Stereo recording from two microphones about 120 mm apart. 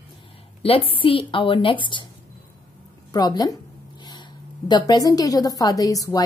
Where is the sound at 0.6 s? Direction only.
50° left (ahead or behind).